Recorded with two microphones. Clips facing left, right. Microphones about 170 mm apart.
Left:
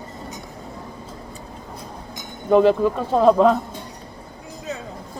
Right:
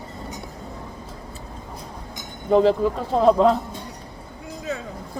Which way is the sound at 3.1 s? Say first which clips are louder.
Left 1 dB; centre (ahead or behind).